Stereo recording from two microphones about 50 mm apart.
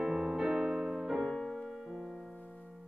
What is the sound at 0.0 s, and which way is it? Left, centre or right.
Music, centre.